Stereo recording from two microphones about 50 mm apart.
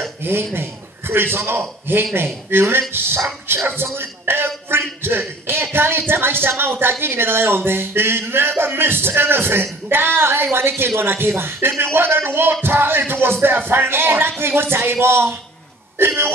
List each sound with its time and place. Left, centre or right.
0.2 s a man's voice: right